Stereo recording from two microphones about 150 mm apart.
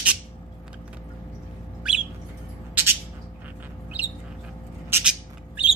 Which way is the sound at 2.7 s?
15° right (ahead or behind).